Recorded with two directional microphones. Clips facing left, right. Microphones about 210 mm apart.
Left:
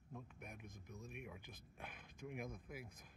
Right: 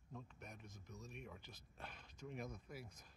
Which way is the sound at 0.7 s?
55° left (ahead or behind).